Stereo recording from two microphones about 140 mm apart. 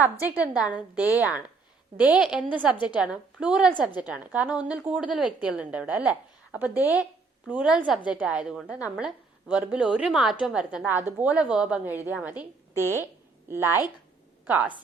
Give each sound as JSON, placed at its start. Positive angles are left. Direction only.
{"t": 0.3, "sound": "a woman's voice", "side_deg": -10}
{"t": 13.5, "sound": "a woman's voice", "side_deg": -15}